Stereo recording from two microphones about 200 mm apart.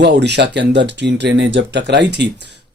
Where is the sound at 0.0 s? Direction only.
60° right (ahead or behind).